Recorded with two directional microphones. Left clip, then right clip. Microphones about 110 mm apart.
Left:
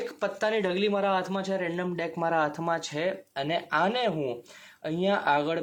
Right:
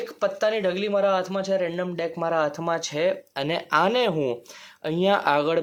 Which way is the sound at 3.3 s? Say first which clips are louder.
Right 4 dB; 45° right (ahead or behind).